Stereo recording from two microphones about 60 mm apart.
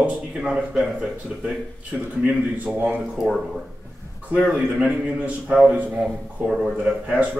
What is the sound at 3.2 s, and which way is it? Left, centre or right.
Speech, centre.